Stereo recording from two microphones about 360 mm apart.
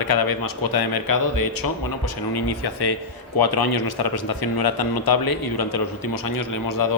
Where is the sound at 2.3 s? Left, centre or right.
Left.